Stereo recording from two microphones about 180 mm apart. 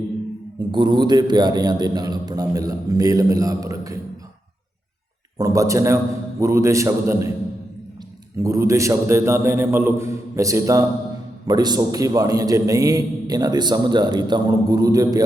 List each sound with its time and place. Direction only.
0.7 s a man's voice: 25° right (ahead or behind)
5.4 s a man's voice: 15° right (ahead or behind)
8.4 s a man's voice: 15° right (ahead or behind)